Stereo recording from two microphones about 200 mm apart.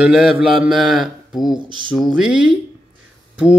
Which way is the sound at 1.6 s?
25° right (ahead or behind).